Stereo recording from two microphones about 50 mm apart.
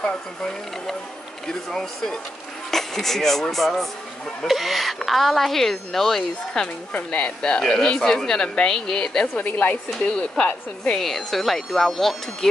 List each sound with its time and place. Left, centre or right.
1.5 s a woman's voice: centre
6.9 s speech: left
7.5 s speech: centre
9.4 s a woman's voice: left
10.1 s speech: left
10.8 s a woman's voice: centre